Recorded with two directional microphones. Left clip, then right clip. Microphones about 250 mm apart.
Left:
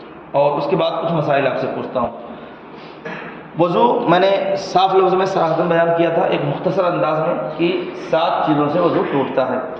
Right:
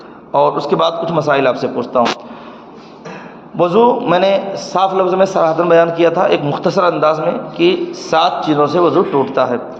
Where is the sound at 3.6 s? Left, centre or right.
Centre.